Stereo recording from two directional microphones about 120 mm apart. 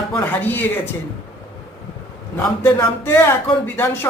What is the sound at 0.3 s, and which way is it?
Speech, 15° left (ahead or behind).